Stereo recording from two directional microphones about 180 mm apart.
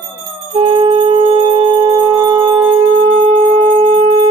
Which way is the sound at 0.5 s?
25° right (ahead or behind).